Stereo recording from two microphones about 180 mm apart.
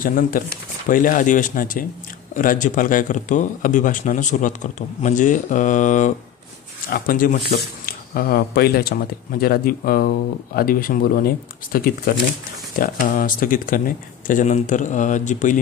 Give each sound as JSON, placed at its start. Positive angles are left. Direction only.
{"t": 0.0, "sound": "speech", "side_deg": 50}